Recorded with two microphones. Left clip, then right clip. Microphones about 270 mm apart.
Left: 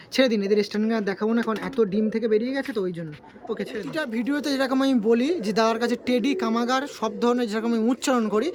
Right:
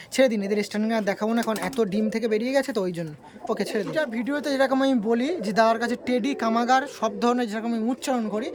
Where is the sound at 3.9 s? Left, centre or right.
Centre.